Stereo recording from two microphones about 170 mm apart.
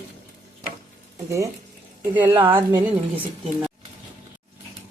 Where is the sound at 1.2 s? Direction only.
20° right (ahead or behind).